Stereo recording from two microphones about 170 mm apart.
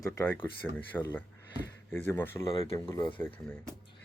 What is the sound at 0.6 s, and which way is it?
Speech, 5° left (ahead or behind).